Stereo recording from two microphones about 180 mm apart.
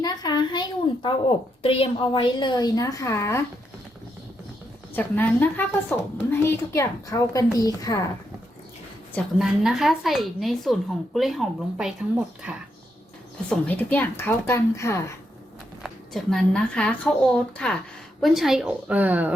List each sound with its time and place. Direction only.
0.0 s a sound: 20° left (ahead or behind)
1.6 s a woman's voice: 30° left (ahead or behind); by 3.4 s 15° left (ahead or behind)
4.9 s a woman's voice: 10° left (ahead or behind)
9.1 s a woman's voice: centre (ahead or behind)
13.5 s a woman's voice: 10° left (ahead or behind)
15.8 s a woman's voice: centre (ahead or behind)